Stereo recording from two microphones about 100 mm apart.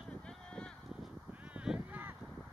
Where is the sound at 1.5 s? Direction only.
10° right (ahead or behind).